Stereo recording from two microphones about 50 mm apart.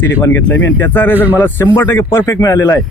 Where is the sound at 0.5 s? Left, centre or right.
Left.